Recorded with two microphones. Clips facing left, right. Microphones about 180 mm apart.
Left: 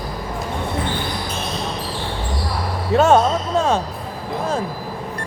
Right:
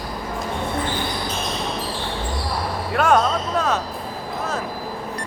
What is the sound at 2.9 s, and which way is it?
Basketball bounce, 25° left (ahead or behind).